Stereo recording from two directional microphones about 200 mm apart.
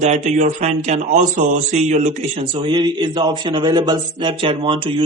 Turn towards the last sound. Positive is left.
turn(degrees=-25)  # may be behind; listen again after turning